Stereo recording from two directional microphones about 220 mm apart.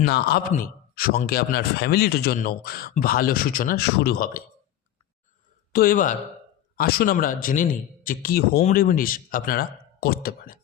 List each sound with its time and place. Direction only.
0.0 s a man's voice: 45° left (ahead or behind)
5.7 s speech: 40° left (ahead or behind)